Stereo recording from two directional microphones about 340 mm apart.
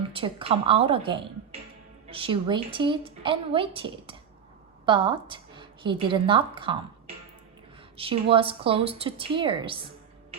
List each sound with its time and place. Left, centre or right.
0.1 s a woman's voice: centre
7.9 s a woman's voice: centre